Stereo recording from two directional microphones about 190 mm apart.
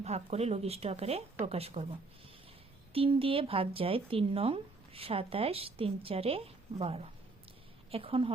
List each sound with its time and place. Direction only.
0.0 s a woman's voice: 35° right (ahead or behind)